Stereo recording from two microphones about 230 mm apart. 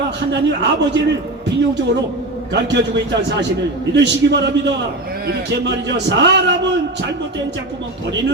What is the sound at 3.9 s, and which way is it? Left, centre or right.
A man's voice, right.